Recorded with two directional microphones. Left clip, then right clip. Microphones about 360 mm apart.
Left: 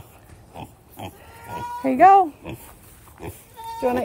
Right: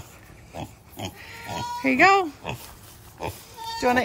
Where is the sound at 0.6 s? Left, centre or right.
Centre.